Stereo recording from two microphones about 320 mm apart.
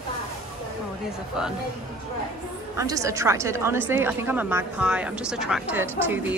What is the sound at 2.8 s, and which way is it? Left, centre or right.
A woman's voice, centre.